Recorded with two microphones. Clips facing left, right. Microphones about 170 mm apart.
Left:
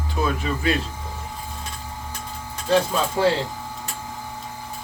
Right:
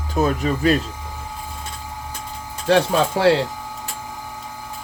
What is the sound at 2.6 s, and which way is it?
Speech, 75° right (ahead or behind).